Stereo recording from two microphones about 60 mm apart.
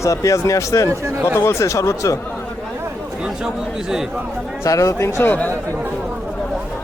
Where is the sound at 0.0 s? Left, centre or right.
Left.